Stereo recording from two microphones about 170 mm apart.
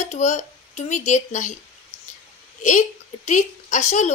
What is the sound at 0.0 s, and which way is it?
Speech, 45° left (ahead or behind).